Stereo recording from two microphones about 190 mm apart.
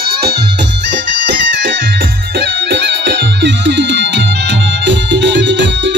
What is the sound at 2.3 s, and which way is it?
Music, 65° right (ahead or behind).